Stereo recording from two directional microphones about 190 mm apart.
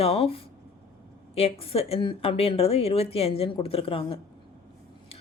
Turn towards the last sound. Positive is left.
turn(degrees=30)  # may be behind; listen again after turning